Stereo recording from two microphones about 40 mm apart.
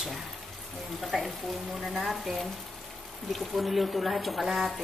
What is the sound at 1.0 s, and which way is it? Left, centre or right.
Speech, centre.